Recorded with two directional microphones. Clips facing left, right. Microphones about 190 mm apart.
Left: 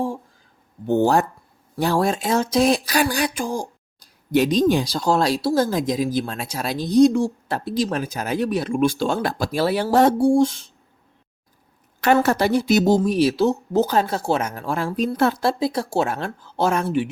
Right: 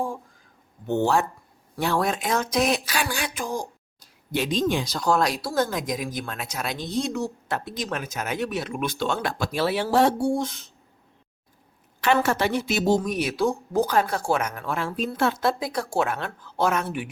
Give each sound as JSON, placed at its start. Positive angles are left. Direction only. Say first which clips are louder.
{"t": 0.9, "sound": "speech", "louder": "left 4 dB", "side_deg": 35}
{"t": 4.3, "sound": "speech", "louder": "left 7 dB", "side_deg": 40}
{"t": 11.9, "sound": "speech", "louder": "left 4 dB", "side_deg": 40}